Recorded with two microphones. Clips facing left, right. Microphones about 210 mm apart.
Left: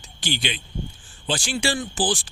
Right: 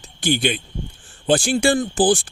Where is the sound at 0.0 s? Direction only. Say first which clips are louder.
Right 9 dB; 55° right (ahead or behind).